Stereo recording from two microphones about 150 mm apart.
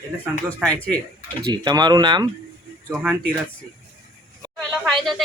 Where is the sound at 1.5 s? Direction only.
30° right (ahead or behind).